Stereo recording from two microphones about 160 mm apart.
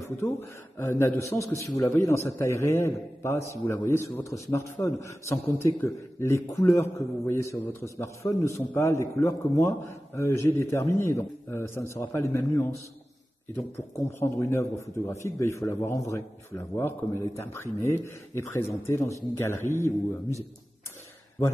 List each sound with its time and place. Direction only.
0.0 s a man's voice: 15° left (ahead or behind)